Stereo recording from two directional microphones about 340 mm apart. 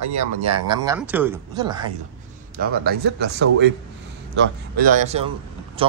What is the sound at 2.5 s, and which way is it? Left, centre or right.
A man's voice, right.